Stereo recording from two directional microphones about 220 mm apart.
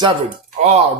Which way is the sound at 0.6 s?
30° right (ahead or behind).